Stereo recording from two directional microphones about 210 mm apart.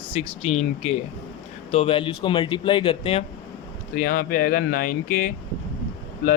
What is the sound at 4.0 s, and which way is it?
Speech, 45° left (ahead or behind).